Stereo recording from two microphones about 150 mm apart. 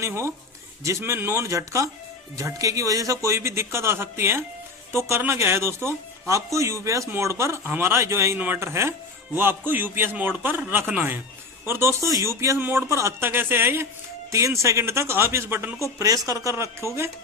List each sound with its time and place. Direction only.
0.0 s a man's voice: 20° right (ahead or behind)